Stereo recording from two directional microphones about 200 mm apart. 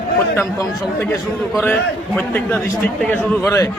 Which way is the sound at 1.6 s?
10° left (ahead or behind).